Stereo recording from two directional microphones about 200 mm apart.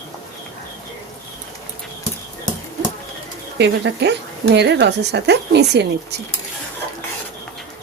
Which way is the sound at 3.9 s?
60° right (ahead or behind).